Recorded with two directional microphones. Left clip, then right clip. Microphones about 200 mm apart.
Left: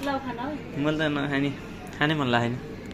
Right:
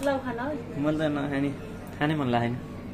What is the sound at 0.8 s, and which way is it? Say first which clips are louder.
A man's voice: left 1 dB; centre (ahead or behind).